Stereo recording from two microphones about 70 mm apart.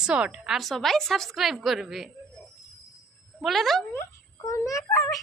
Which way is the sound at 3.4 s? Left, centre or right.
Centre.